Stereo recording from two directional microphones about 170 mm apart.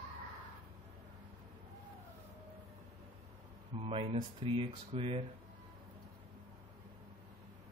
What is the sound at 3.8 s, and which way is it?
Speech, 30° right (ahead or behind).